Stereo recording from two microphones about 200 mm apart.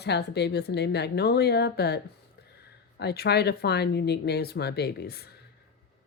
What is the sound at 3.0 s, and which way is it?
A woman's voice, 55° left (ahead or behind).